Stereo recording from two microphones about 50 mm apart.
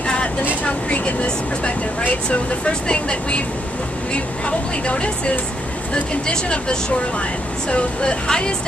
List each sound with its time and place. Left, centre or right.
0.0 s vehicle: centre
0.7 s speech: left